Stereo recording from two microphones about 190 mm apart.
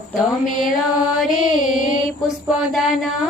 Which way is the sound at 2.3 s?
Centre (ahead or behind).